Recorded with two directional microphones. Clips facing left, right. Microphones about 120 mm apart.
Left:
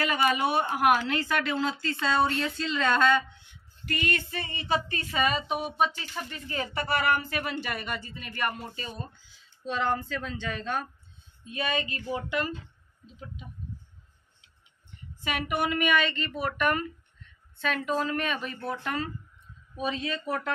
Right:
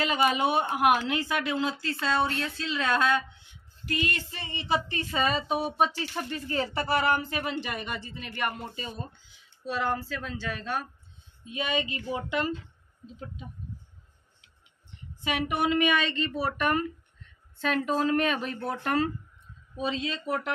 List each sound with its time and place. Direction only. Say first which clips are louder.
0.0 s a woman's voice: right 1 dB; 20° right (ahead or behind)
5.4 s speech: right 2 dB; centre (ahead or behind)
6.1 s speech: right 4 dB; 35° right (ahead or behind); by 10.9 s 5° right (ahead or behind)
11.4 s a woman's voice: right 1 dB; 15° right (ahead or behind)
13.0 s a woman's voice: right 3 dB; 35° right (ahead or behind)
15.2 s speech: right 2 dB; 25° right (ahead or behind)
17.6 s a woman's voice: right 2 dB; 40° right (ahead or behind)
19.8 s speech: even; 25° right (ahead or behind)